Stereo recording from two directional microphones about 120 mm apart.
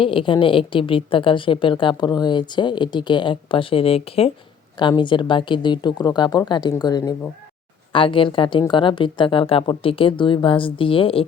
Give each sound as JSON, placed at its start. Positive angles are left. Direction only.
{"t": 0.0, "sound": "a woman's voice", "side_deg": 45}
{"t": 4.8, "sound": "a woman's voice", "side_deg": 40}
{"t": 7.9, "sound": "a woman's voice", "side_deg": 45}